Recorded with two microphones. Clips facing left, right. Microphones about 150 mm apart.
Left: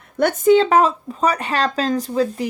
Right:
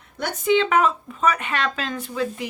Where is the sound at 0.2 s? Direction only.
55° left (ahead or behind).